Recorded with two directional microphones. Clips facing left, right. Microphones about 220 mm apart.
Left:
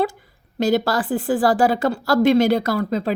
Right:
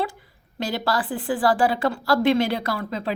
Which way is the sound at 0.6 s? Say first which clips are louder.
Left 7 dB; 45° left (ahead or behind).